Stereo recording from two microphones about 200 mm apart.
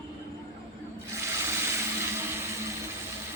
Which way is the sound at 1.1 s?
15° right (ahead or behind).